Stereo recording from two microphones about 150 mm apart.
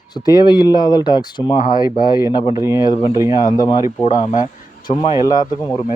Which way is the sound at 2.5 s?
20° right (ahead or behind).